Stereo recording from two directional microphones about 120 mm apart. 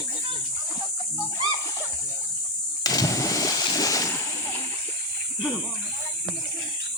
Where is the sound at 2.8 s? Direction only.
30° left (ahead or behind).